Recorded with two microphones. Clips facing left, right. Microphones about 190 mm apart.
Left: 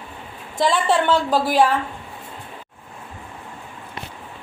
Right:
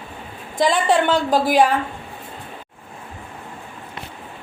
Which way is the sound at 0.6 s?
15° right (ahead or behind).